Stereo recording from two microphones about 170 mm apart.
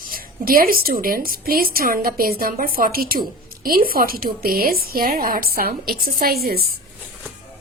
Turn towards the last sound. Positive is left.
turn(degrees=-65)  # may be behind; listen again after turning